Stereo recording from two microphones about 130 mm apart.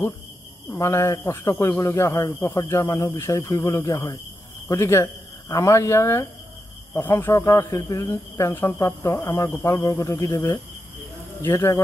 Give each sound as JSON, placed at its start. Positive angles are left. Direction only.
{"t": 0.7, "sound": "a man's voice", "side_deg": 20}